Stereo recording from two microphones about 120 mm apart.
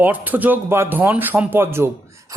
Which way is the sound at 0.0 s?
15° right (ahead or behind).